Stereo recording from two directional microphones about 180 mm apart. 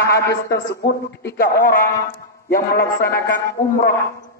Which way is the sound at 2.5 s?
55° left (ahead or behind).